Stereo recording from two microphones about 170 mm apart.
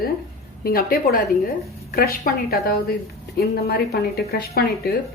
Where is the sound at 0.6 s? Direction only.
60° left (ahead or behind).